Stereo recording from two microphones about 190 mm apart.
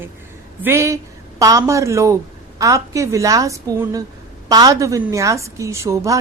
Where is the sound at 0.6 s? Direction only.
15° right (ahead or behind).